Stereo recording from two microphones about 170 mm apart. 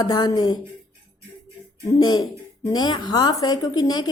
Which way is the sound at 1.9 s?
25° left (ahead or behind).